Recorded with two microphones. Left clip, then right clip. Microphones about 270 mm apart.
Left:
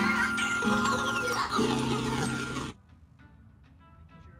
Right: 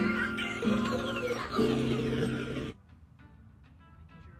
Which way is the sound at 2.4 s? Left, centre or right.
Left.